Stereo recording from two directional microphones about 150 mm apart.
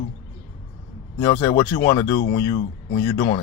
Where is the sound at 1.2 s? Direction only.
20° left (ahead or behind).